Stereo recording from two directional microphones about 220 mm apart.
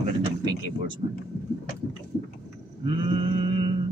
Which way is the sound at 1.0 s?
30° right (ahead or behind).